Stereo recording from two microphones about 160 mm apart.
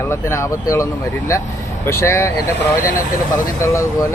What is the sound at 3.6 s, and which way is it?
Speech, 20° left (ahead or behind).